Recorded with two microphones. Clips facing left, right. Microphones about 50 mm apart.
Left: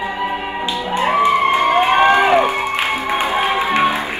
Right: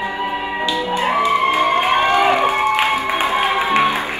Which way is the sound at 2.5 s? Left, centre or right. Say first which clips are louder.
Right 3 dB; right.